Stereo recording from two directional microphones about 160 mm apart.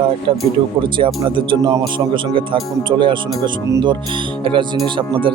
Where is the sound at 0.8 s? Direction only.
30° right (ahead or behind).